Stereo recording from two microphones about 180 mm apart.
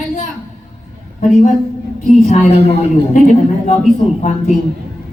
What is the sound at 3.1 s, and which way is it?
Speech, 45° left (ahead or behind).